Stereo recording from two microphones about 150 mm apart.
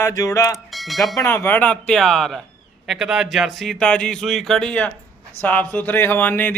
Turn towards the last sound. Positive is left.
turn(degrees=15)  # may be behind; listen again after turning